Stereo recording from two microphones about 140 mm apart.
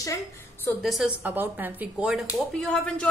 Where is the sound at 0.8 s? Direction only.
Centre (ahead or behind).